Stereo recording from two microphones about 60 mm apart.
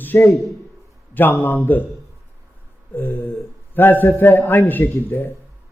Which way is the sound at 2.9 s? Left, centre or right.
Left.